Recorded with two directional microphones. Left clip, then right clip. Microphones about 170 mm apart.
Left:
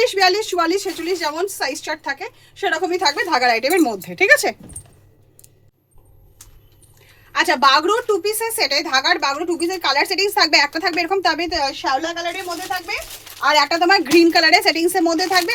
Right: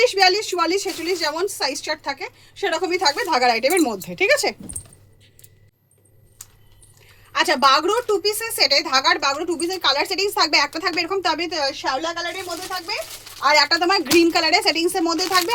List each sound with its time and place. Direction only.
0.0 s a woman's voice: 20° left (ahead or behind)
7.3 s a woman's voice: 20° left (ahead or behind)
13.4 s a woman's voice: 25° left (ahead or behind)